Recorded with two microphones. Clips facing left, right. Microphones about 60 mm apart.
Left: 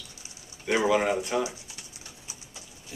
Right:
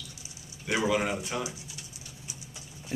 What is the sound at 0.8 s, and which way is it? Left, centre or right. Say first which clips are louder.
Speech: left 4 dB; centre.